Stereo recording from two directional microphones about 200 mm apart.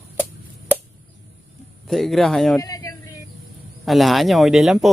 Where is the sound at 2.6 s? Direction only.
15° left (ahead or behind).